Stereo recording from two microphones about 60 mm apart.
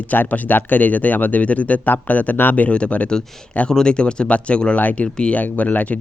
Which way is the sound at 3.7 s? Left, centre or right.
Centre.